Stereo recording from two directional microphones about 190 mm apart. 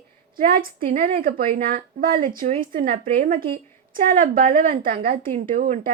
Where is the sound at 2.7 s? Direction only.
45° right (ahead or behind).